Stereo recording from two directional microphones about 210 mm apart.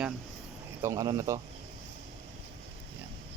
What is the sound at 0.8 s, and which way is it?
Speech, 15° right (ahead or behind).